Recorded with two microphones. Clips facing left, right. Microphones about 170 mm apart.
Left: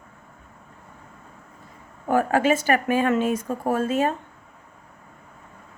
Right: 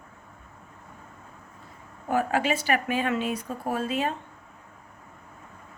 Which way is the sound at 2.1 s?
50° left (ahead or behind).